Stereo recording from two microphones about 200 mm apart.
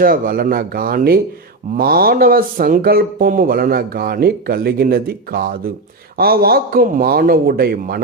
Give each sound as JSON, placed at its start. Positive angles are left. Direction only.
{"t": 0.0, "sound": "speech", "side_deg": -45}